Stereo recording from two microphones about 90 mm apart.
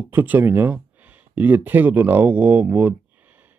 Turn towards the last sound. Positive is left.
turn(degrees=-20)  # may be behind; listen again after turning